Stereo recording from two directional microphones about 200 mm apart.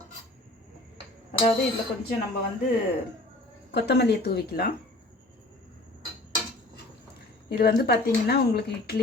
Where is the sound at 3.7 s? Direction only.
55° left (ahead or behind).